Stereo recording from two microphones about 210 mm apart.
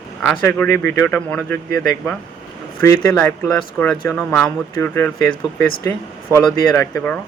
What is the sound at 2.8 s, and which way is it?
Speech, 15° left (ahead or behind).